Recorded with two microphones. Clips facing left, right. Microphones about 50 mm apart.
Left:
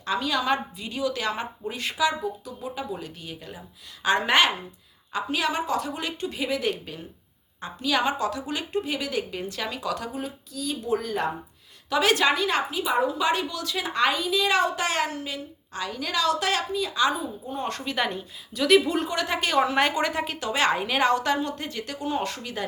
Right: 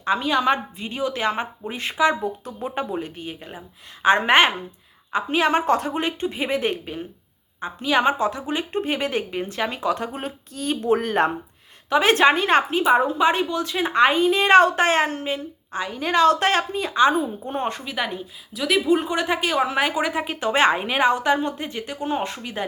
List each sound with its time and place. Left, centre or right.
0.0 s a woman's voice: right
2.2 s a woman's voice: right
8.8 s a woman's voice: right
10.1 s speech: right
11.9 s a woman's voice: right
17.2 s speech: right
17.7 s speech: centre
18.9 s speech: right
20.4 s a woman's voice: right